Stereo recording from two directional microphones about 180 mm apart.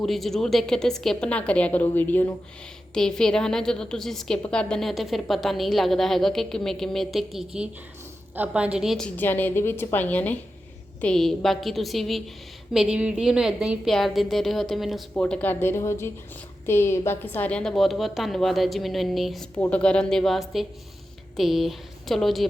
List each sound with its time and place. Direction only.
0.0 s a woman's voice: centre (ahead or behind)